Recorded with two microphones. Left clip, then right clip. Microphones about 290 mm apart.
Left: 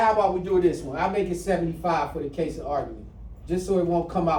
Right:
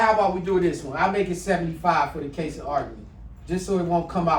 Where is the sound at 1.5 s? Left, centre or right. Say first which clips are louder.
Right 3 dB; centre.